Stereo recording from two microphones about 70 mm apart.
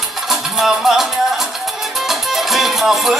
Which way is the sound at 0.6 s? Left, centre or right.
Centre.